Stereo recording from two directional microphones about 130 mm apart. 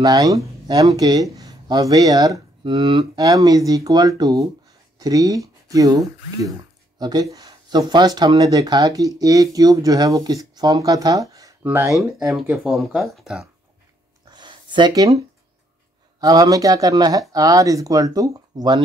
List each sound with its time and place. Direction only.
0.0 s speech: 30° right (ahead or behind)
11.6 s speech: 15° right (ahead or behind)
11.9 s speech: centre (ahead or behind)
14.3 s a sound: 35° right (ahead or behind)
16.2 s speech: 30° right (ahead or behind)